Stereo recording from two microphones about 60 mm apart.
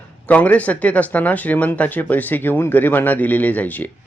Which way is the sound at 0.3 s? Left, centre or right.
Left.